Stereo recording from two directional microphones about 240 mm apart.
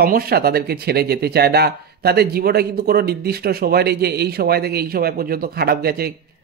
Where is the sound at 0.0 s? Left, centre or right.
Right.